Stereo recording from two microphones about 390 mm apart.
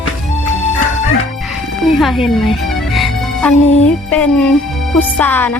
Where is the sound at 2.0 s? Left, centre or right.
Centre.